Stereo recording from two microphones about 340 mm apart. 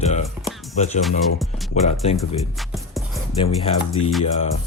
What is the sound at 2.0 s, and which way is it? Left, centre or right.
Speech, centre.